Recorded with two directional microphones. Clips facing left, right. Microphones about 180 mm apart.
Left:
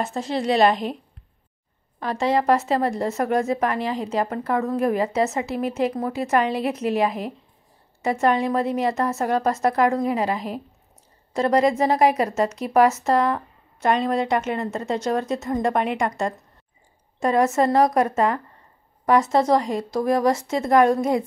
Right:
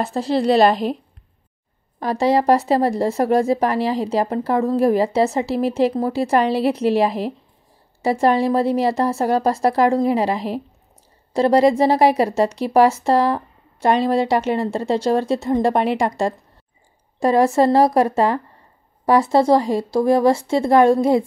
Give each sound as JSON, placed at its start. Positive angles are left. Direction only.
{"t": 0.0, "sound": "speech", "side_deg": -35}
{"t": 2.0, "sound": "speech", "side_deg": -40}